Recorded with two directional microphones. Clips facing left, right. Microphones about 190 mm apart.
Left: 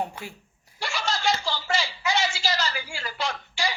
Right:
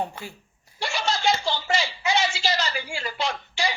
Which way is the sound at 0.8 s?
20° right (ahead or behind).